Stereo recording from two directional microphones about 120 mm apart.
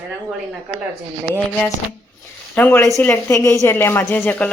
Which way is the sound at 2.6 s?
15° left (ahead or behind).